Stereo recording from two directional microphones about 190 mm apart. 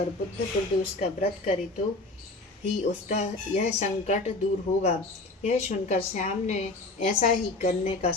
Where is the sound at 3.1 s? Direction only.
35° left (ahead or behind).